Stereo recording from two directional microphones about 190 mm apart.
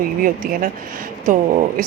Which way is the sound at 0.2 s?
45° right (ahead or behind).